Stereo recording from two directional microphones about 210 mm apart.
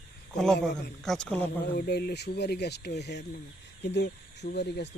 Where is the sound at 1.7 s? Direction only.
50° left (ahead or behind).